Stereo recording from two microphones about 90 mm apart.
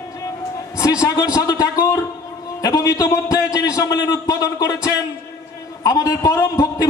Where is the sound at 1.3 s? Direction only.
40° left (ahead or behind).